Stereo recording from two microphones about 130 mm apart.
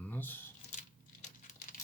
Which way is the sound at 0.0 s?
15° left (ahead or behind).